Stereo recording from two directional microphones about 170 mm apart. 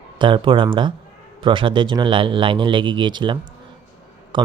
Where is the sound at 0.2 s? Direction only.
30° right (ahead or behind).